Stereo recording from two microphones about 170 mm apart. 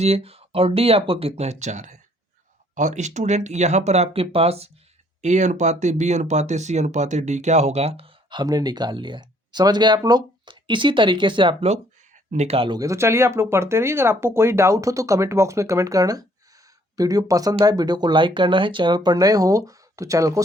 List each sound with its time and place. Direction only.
0.0 s speech: 35° right (ahead or behind); by 20.4 s 20° right (ahead or behind)